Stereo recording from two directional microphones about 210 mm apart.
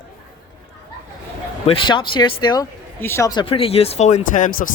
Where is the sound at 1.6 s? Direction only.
25° left (ahead or behind).